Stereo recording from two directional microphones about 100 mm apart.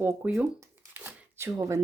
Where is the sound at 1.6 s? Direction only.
30° right (ahead or behind).